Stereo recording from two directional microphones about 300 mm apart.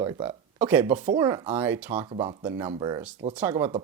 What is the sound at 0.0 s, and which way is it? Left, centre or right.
Speech, centre.